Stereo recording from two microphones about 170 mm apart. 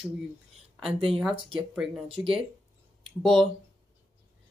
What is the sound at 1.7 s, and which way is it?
Speech, 5° right (ahead or behind).